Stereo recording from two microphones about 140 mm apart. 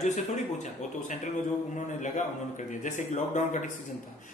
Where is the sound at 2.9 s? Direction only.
60° left (ahead or behind).